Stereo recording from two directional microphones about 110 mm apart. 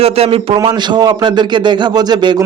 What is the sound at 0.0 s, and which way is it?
Speech, 65° right (ahead or behind).